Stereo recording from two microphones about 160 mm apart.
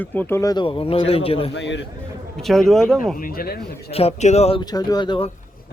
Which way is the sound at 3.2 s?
70° left (ahead or behind).